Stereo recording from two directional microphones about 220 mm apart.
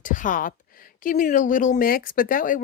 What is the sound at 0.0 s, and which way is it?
Speech, 35° left (ahead or behind).